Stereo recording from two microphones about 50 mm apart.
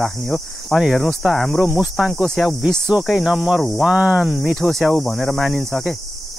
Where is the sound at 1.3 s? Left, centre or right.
Centre.